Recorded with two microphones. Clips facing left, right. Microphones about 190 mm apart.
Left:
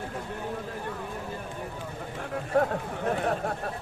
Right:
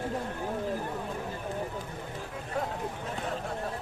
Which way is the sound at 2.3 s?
60° left (ahead or behind).